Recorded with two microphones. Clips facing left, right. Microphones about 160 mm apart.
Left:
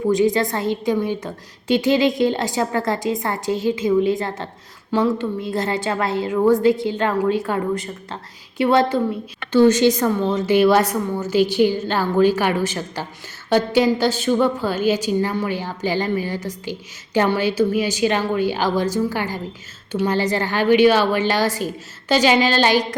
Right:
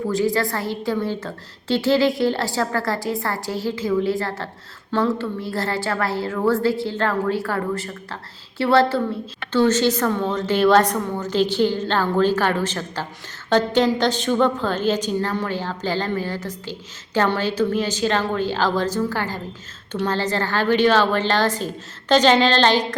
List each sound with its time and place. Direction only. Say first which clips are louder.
0.1 s a woman's voice: left 4 dB; 20° left (ahead or behind)